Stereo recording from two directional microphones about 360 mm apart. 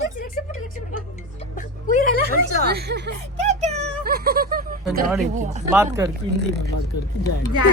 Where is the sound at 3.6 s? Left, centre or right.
Centre.